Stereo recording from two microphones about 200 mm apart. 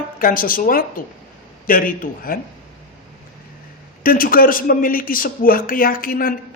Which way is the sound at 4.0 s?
45° left (ahead or behind).